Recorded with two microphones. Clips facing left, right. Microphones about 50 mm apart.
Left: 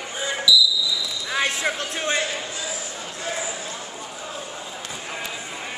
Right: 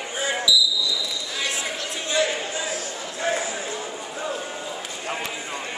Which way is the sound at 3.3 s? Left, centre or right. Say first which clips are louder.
Right 5 dB; right.